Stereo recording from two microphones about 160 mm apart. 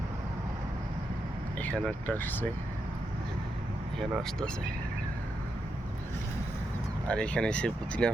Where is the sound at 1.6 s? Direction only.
10° left (ahead or behind).